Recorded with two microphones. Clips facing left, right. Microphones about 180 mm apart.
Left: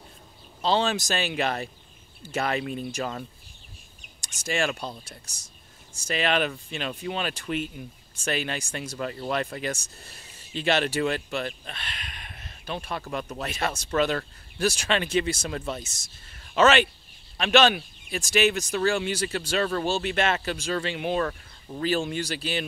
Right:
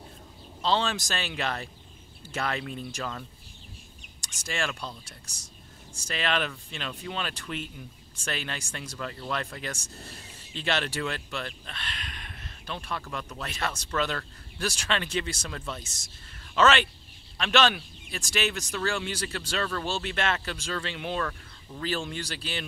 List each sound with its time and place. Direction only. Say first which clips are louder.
0.6 s speech: left 3 dB; 10° left (ahead or behind)
4.5 s speech: left 5 dB; 15° left (ahead or behind)
6.0 s speech: left 4 dB; 15° left (ahead or behind)
21.8 s speech: left 6 dB; 10° left (ahead or behind)